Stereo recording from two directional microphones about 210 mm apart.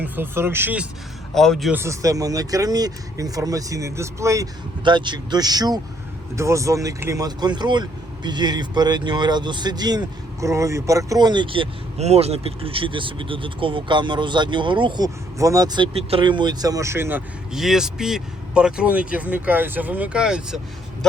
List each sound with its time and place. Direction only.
0.0 s speech: 10° right (ahead or behind)
1.3 s speech: centre (ahead or behind)
1.8 s speech: 15° right (ahead or behind)